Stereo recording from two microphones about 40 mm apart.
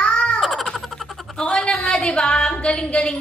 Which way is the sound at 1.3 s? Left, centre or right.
Centre.